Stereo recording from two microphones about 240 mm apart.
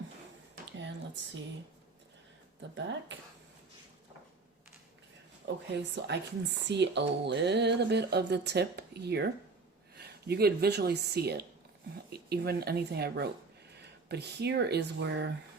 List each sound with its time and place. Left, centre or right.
0.5 s a sound: right
2.7 s speech: right
5.5 s speech: right